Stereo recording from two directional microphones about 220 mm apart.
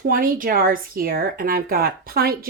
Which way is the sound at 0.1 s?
40° right (ahead or behind).